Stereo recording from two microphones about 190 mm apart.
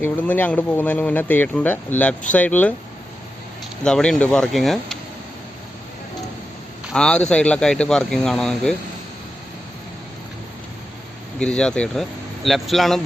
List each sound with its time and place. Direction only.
0.0 s speech: 10° left (ahead or behind)
3.8 s speech: 5° left (ahead or behind)
6.9 s speech: 5° left (ahead or behind)
11.3 s speech: 5° left (ahead or behind)